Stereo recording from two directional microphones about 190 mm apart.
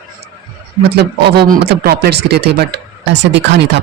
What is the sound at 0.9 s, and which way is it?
Speech, 60° right (ahead or behind).